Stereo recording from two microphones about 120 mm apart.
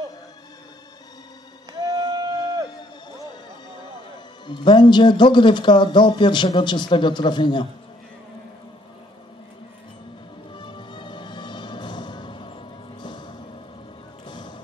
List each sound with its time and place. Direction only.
2.0 s a sound: 30° right (ahead or behind)
4.5 s speech: 40° left (ahead or behind)
10.5 s music: 40° left (ahead or behind)